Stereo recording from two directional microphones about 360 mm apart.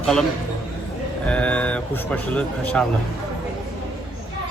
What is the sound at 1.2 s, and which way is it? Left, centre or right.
Speech, centre.